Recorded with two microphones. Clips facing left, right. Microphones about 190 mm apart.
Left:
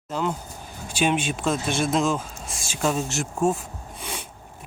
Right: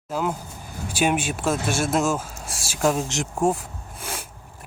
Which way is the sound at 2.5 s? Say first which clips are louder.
Right 1 dB; 90° right.